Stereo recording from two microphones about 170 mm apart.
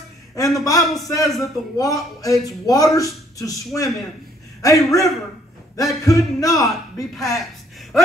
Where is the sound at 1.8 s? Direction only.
20° left (ahead or behind).